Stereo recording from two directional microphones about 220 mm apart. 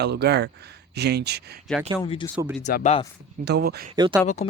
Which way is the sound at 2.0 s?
20° left (ahead or behind).